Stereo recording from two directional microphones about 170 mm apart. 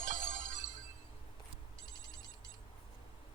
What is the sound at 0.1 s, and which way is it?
Music, 50° right (ahead or behind).